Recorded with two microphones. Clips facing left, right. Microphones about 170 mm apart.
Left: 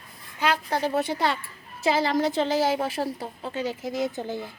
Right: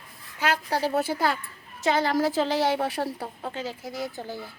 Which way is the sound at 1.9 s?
Centre (ahead or behind).